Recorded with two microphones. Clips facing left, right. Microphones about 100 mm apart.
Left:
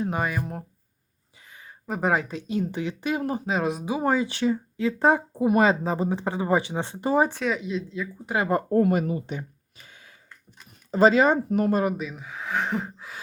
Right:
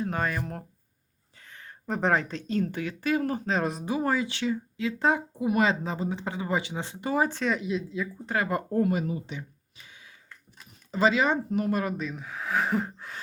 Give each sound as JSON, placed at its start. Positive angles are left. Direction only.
{"t": 0.0, "sound": "speech", "side_deg": 10}
{"t": 1.4, "sound": "a sound", "side_deg": 10}
{"t": 2.4, "sound": "speech", "side_deg": 15}
{"t": 3.8, "sound": "speech", "side_deg": 15}
{"t": 4.1, "sound": "speech", "side_deg": 35}
{"t": 7.2, "sound": "speech", "side_deg": 15}
{"t": 7.4, "sound": "speech", "side_deg": 0}
{"t": 8.7, "sound": "speech", "side_deg": 60}
{"t": 11.7, "sound": "speech", "side_deg": 25}
{"t": 11.9, "sound": "speech", "side_deg": 5}